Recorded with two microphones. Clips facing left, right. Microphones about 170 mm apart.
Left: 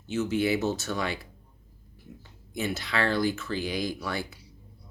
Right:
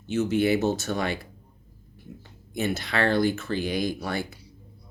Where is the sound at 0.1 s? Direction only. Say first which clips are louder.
Right 3 dB; 60° right (ahead or behind).